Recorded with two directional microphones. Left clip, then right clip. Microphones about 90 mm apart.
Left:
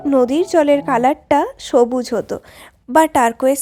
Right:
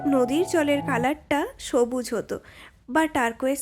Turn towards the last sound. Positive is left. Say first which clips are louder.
# left 10 dB
turn(degrees=40)  # may be behind; listen again after turning